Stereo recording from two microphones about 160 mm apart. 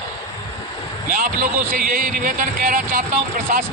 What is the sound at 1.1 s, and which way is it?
Speech, 60° right (ahead or behind).